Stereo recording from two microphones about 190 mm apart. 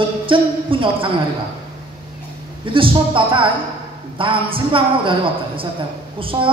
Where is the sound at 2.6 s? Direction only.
25° right (ahead or behind).